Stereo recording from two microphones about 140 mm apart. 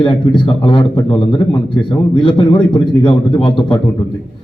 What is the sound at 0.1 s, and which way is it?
Speech, 35° left (ahead or behind).